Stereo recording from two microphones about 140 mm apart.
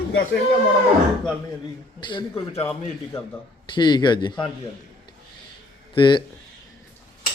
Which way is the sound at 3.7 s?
30° left (ahead or behind).